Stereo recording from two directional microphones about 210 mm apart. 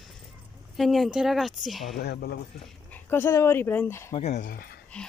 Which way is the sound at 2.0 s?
50° left (ahead or behind).